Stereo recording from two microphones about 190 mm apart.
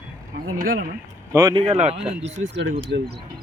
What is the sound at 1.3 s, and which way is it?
Speech, 20° right (ahead or behind).